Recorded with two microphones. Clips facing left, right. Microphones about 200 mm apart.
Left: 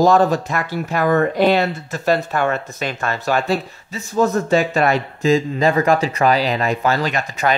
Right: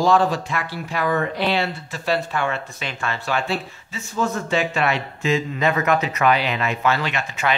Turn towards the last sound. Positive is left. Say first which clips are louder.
# left 4 dB
turn(degrees=40)  # may be behind; listen again after turning